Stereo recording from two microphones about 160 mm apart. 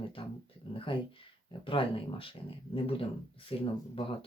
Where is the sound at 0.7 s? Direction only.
30° left (ahead or behind).